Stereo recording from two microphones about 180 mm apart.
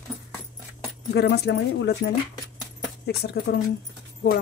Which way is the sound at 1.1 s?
65° left (ahead or behind).